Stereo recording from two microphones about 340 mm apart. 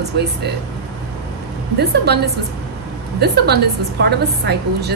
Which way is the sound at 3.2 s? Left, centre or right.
Right.